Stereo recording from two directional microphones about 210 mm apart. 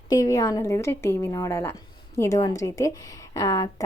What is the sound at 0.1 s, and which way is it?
A woman's voice, 15° left (ahead or behind).